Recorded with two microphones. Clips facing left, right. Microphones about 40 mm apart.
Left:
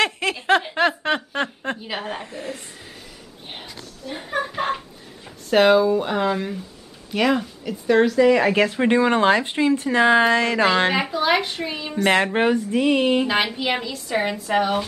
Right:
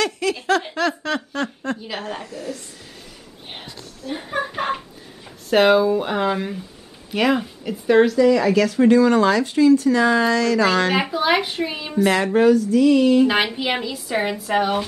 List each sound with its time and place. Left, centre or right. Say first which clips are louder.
0.0 s giggle: even; left
0.7 s speech: left 2 dB; left
1.8 s a woman's voice: even; centre
2.2 s a woman's voice: right 1 dB; left
3.5 s a sound: right 1 dB; centre
5.5 s a woman's voice: even; centre
8.2 s speech: even; left
11.0 s a woman's voice: right 1 dB; centre
12.1 s speech: right 2 dB; left
13.3 s a woman's voice: right 1 dB; centre